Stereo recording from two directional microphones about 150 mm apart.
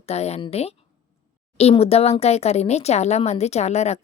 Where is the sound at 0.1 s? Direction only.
45° left (ahead or behind).